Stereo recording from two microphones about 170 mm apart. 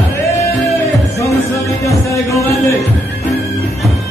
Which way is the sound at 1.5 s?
20° left (ahead or behind).